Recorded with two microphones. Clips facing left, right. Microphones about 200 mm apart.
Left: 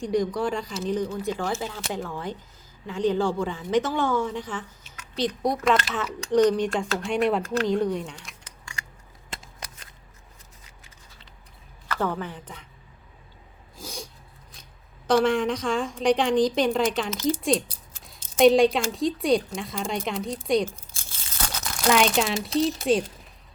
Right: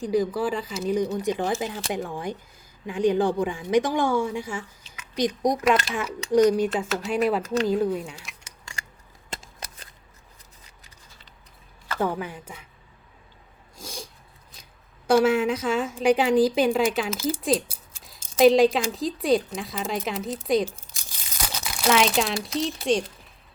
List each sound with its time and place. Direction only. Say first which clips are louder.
0.0 s a woman's voice: right 1 dB; 5° right (ahead or behind)
11.9 s a woman's voice: right 2 dB; 10° right (ahead or behind)
13.7 s sneeze: left 1 dB; centre (ahead or behind)
15.0 s a woman's voice: right 2 dB; 5° right (ahead or behind)
20.9 s crumpling: even; 15° right (ahead or behind)
22.6 s a woman's voice: left 1 dB; centre (ahead or behind)